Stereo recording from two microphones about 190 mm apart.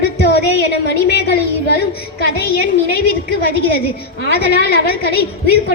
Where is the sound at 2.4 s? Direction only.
55° left (ahead or behind).